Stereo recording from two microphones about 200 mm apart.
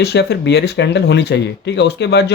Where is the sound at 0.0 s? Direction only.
55° left (ahead or behind).